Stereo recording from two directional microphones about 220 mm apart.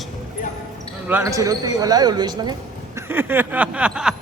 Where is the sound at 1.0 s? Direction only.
10° right (ahead or behind).